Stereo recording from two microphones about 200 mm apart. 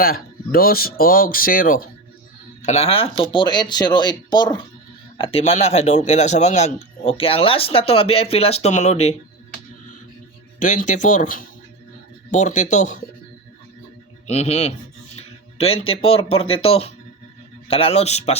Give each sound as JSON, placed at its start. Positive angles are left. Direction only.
{"t": 0.0, "sound": "speech", "side_deg": 50}
{"t": 2.6, "sound": "a man's voice", "side_deg": 35}
{"t": 10.6, "sound": "speech", "side_deg": 40}
{"t": 14.3, "sound": "speech", "side_deg": 30}